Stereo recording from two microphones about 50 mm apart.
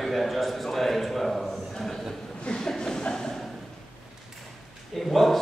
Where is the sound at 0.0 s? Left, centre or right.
Centre.